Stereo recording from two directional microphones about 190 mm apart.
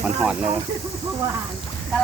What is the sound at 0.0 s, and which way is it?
Speech, 5° right (ahead or behind).